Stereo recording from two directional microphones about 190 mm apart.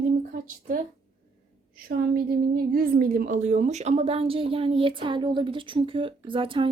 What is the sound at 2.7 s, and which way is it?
A woman's voice, 50° right (ahead or behind).